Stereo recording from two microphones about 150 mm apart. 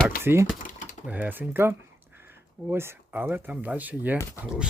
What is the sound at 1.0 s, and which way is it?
Speech, 10° right (ahead or behind).